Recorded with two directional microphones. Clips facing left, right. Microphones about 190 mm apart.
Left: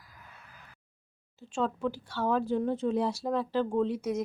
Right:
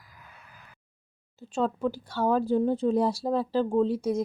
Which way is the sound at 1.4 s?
40° right (ahead or behind).